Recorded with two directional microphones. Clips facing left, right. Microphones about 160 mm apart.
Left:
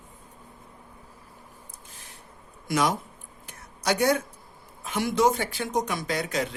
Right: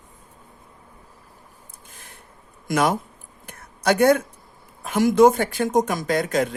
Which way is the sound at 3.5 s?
55° right (ahead or behind).